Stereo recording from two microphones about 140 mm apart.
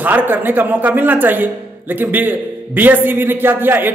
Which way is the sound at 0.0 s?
15° right (ahead or behind).